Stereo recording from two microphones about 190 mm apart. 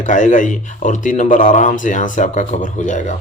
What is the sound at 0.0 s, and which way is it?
Speech, 40° left (ahead or behind).